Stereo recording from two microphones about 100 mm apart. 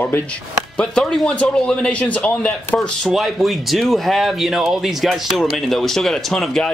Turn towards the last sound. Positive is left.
turn(degrees=5)  # may be behind; listen again after turning